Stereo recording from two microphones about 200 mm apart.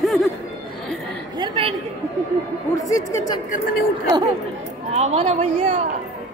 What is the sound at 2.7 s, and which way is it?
Speech, 15° left (ahead or behind).